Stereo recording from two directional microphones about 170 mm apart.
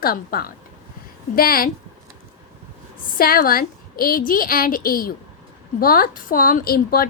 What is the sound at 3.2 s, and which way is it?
A woman's voice, 60° left (ahead or behind).